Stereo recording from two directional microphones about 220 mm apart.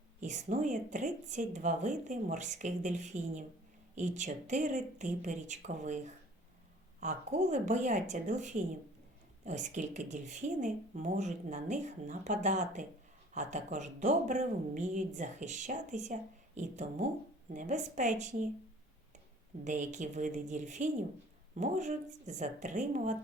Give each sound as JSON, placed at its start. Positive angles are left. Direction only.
{"t": 0.2, "sound": "a woman's voice", "side_deg": -35}
{"t": 19.6, "sound": "a woman's voice", "side_deg": -35}